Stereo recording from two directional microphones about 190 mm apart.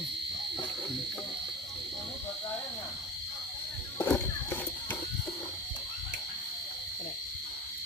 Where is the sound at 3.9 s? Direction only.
10° left (ahead or behind).